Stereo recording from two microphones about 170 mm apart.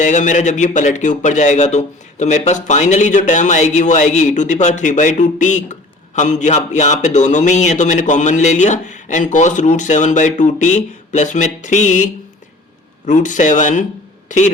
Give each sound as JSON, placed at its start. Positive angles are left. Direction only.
{"t": 0.0, "sound": "a man's voice", "side_deg": 45}